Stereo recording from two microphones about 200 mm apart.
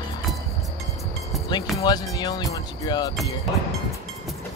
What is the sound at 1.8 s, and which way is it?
Music, 20° left (ahead or behind).